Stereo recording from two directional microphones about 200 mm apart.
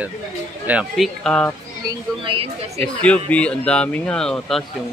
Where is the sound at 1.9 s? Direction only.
25° right (ahead or behind).